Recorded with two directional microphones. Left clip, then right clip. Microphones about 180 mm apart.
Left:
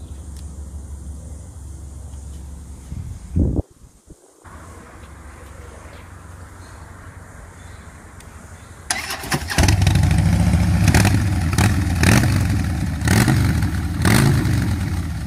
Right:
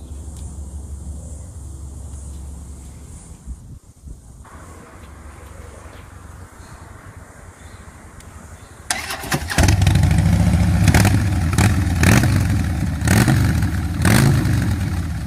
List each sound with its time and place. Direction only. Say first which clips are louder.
8.8 s vehicle: even; 5° right (ahead or behind)
13.0 s vehicle: right 1 dB; 15° right (ahead or behind)